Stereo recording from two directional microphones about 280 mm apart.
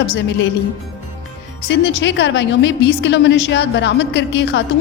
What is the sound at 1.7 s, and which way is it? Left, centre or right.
A woman's voice, left.